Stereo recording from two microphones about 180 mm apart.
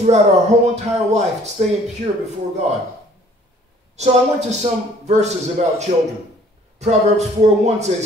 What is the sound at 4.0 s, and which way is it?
Speech, 40° right (ahead or behind).